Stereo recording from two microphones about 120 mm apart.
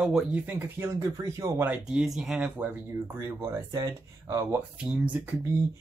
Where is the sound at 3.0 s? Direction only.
20° right (ahead or behind).